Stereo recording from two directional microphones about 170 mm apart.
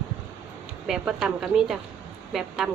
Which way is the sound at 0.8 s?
5° right (ahead or behind).